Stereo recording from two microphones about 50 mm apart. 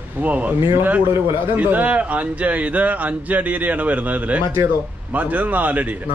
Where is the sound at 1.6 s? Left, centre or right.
Right.